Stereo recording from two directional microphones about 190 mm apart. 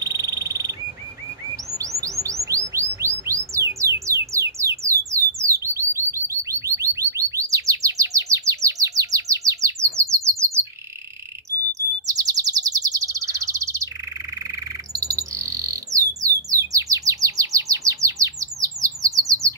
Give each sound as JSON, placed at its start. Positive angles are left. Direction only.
{"t": 0.0, "sound": "frog", "side_deg": -20}
{"t": 1.8, "sound": "chirp", "side_deg": -15}
{"t": 12.1, "sound": "bird vocalization", "side_deg": -20}
{"t": 14.5, "sound": "bird", "side_deg": -15}
{"t": 16.3, "sound": "chirp", "side_deg": -15}